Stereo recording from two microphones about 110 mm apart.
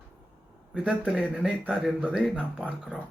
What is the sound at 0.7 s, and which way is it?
Speech, 10° right (ahead or behind).